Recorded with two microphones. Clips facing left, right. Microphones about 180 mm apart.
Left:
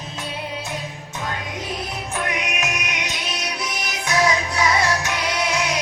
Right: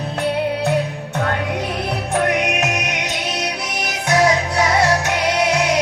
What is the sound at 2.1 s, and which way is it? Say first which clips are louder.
Music: right 8 dB; 65° right (ahead or behind).